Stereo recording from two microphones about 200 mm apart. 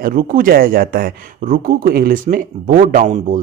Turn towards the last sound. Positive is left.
turn(degrees=-40)  # may be behind; listen again after turning